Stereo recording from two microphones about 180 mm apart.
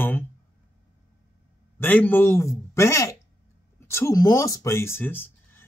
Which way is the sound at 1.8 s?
10° left (ahead or behind).